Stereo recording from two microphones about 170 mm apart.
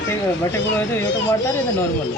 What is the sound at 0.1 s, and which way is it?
Speech, 15° left (ahead or behind).